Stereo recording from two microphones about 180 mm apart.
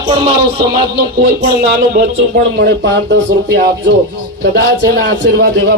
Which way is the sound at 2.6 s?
70° right (ahead or behind).